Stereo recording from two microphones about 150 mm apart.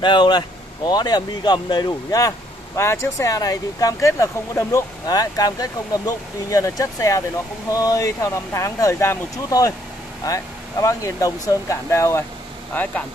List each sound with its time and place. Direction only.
0.0 s speech: 30° left (ahead or behind); by 13.0 s 10° left (ahead or behind)